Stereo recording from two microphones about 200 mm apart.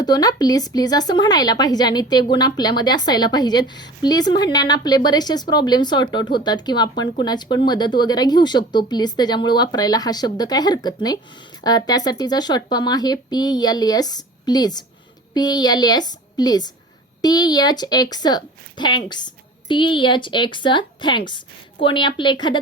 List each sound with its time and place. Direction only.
0.0 s speech: 20° left (ahead or behind)